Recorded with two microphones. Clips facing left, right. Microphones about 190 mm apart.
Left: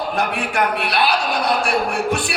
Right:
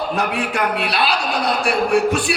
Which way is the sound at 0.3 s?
60° left (ahead or behind).